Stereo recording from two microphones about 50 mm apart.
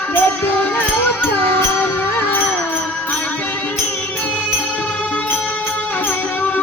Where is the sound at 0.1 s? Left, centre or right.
Left.